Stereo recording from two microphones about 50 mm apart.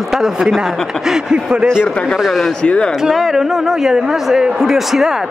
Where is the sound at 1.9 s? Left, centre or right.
Centre.